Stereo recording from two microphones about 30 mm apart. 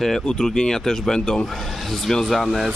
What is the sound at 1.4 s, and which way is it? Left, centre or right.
Speech, centre.